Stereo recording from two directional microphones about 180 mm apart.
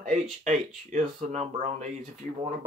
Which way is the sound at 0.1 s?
45° right (ahead or behind).